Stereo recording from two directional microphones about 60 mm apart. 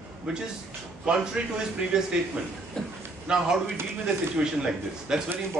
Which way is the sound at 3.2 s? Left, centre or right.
Centre.